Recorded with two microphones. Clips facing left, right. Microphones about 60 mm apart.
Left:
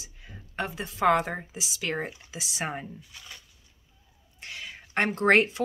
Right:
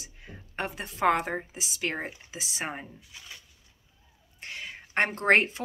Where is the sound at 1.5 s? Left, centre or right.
Right.